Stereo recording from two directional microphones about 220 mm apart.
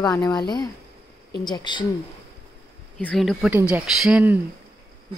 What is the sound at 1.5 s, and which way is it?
Speech, 20° left (ahead or behind).